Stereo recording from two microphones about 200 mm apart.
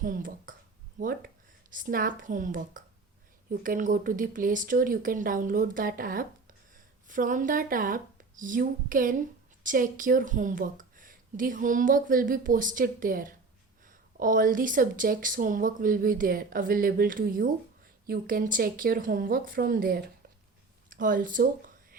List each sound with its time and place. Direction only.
0.0 s speech: 45° right (ahead or behind)